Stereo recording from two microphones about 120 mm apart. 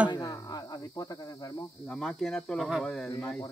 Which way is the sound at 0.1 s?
30° left (ahead or behind).